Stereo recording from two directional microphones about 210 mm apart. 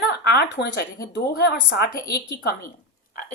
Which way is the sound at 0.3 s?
50° left (ahead or behind).